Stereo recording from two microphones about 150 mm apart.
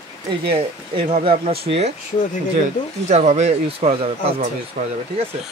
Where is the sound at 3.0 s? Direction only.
45° right (ahead or behind).